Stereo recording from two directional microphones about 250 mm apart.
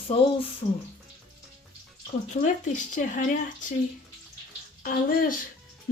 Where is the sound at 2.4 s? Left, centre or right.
Left.